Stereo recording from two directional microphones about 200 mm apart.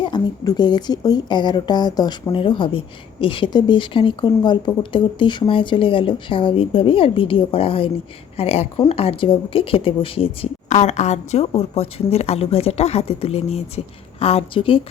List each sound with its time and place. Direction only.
0.0 s a woman's voice: 20° left (ahead or behind)